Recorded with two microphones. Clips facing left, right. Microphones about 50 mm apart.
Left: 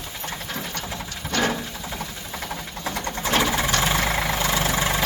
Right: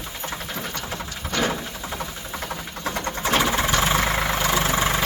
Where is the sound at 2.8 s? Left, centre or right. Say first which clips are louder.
Right 2 dB; right.